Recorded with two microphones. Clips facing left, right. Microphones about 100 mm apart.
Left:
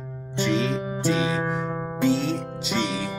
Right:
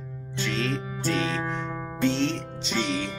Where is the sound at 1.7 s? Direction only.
25° left (ahead or behind).